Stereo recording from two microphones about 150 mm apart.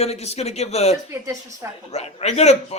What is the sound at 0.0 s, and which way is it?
A man's voice, 45° left (ahead or behind).